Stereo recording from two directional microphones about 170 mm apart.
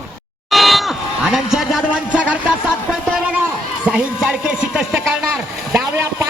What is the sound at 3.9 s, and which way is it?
Speech, 5° right (ahead or behind).